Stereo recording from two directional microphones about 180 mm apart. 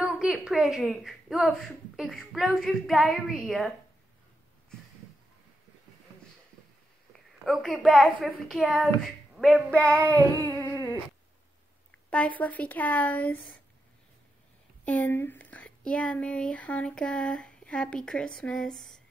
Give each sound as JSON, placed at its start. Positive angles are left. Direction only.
{"t": 0.0, "sound": "speech", "side_deg": -5}
{"t": 7.4, "sound": "speech", "side_deg": 0}
{"t": 10.4, "sound": "a sound", "side_deg": 15}
{"t": 12.1, "sound": "speech", "side_deg": 5}
{"t": 14.9, "sound": "speech", "side_deg": 10}